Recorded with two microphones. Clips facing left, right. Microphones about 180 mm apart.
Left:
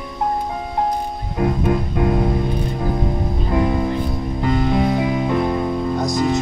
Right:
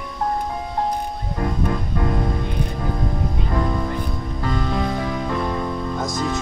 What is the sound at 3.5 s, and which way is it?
Music, 15° left (ahead or behind).